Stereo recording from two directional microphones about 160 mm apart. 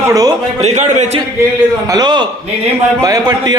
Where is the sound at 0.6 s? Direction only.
45° right (ahead or behind).